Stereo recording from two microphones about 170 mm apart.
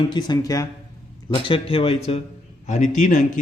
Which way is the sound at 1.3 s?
30° left (ahead or behind).